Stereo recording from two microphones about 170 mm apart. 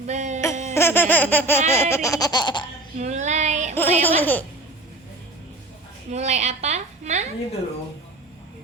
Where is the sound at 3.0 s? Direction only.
45° right (ahead or behind).